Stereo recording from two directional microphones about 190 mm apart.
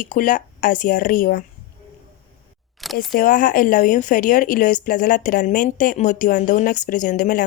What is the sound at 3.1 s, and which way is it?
Speech, 45° left (ahead or behind).